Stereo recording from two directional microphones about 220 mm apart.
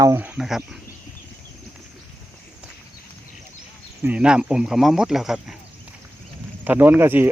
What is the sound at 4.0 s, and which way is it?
Speech, 5° right (ahead or behind).